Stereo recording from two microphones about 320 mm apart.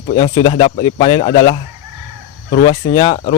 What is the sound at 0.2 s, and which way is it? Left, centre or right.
Speech, centre.